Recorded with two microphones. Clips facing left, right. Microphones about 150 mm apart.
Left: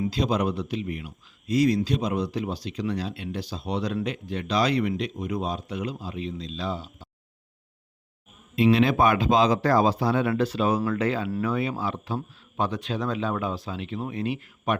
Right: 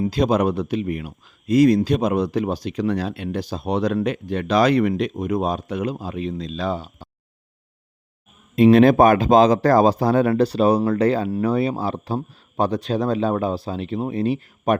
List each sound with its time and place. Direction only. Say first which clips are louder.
0.0 s speech: right 6 dB; 50° right (ahead or behind)
8.5 s speech: right 8 dB; 50° right (ahead or behind)